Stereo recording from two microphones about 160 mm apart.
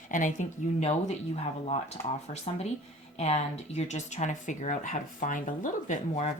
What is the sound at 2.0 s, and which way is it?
Speech, 15° left (ahead or behind).